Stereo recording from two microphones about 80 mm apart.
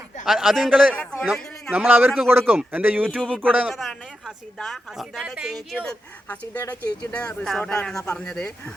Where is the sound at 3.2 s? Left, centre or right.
Centre.